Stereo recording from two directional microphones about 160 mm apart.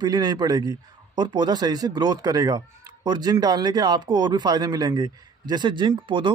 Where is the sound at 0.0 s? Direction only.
25° right (ahead or behind).